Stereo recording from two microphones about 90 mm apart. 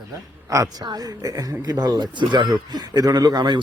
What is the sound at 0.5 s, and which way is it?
Speech, 40° right (ahead or behind).